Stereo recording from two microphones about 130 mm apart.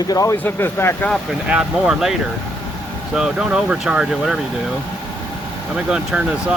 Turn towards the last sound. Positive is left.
turn(degrees=-5)  # may be behind; listen again after turning